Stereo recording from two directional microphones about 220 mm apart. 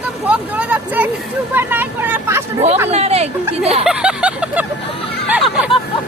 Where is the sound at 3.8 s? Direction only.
5° right (ahead or behind).